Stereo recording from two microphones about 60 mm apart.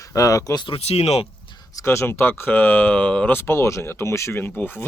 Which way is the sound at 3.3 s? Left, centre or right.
Left.